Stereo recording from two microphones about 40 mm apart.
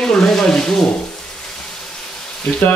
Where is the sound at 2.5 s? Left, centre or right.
Left.